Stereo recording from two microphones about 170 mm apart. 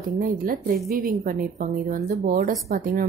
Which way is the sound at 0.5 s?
55° right (ahead or behind).